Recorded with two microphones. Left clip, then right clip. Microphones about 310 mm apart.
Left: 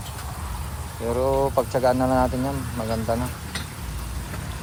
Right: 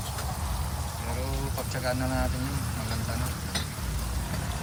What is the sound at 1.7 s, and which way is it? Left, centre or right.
Speech, centre.